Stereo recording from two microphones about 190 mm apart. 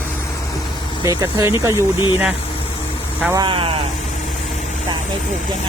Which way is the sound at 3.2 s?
15° right (ahead or behind).